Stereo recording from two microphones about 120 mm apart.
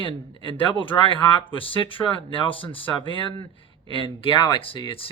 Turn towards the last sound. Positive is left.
turn(degrees=50)  # may be behind; listen again after turning